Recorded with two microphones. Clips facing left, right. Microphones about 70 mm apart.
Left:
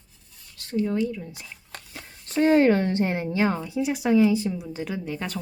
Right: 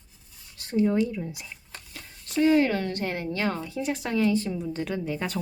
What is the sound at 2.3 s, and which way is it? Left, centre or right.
Speech, left.